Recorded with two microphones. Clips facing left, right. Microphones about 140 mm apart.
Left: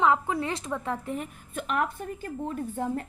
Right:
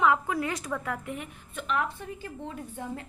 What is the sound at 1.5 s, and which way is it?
A woman's voice, 45° left (ahead or behind).